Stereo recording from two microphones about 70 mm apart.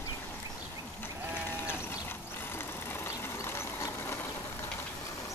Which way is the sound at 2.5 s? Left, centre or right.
Left.